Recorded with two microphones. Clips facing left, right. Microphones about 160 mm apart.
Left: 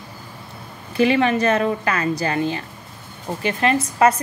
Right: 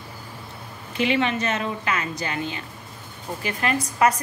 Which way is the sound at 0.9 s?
40° left (ahead or behind).